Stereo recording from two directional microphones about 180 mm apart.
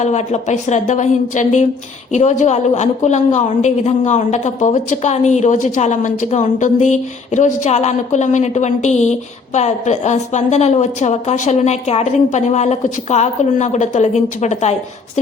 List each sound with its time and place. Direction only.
0.0 s a woman's voice: 40° left (ahead or behind)